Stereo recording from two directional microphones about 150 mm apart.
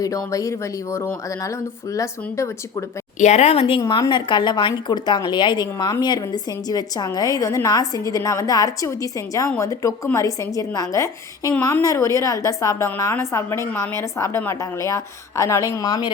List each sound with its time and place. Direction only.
0.0 s a woman's voice: 25° left (ahead or behind)
3.2 s speech: 50° left (ahead or behind)
3.8 s a woman's voice: 25° left (ahead or behind)